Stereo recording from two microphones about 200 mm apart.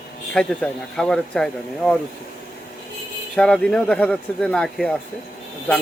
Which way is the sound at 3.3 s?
5° left (ahead or behind).